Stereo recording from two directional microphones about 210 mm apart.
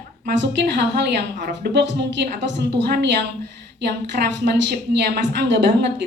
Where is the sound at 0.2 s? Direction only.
55° right (ahead or behind).